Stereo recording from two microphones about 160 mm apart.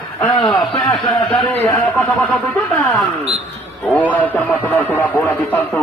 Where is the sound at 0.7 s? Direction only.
35° left (ahead or behind).